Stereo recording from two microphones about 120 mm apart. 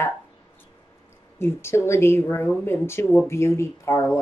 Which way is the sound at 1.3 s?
20° left (ahead or behind).